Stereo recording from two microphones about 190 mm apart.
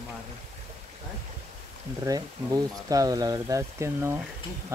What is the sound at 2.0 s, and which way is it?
Speech, 20° right (ahead or behind).